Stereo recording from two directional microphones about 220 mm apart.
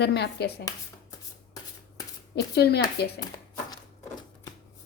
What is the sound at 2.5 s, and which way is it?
Speech, 50° left (ahead or behind).